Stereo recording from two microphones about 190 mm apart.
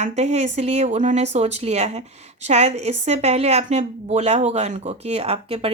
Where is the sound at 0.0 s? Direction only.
35° right (ahead or behind).